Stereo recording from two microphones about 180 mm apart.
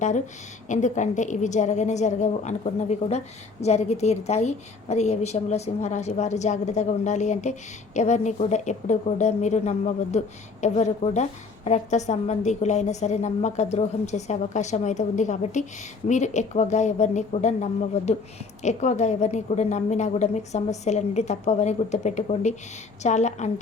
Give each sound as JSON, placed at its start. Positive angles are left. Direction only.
{"t": 0.7, "sound": "a woman's voice", "side_deg": 45}